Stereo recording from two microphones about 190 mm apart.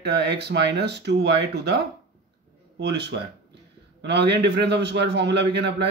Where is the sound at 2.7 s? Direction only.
60° right (ahead or behind).